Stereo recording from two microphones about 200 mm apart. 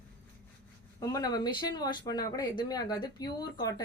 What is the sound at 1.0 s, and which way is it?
Speech, 20° left (ahead or behind).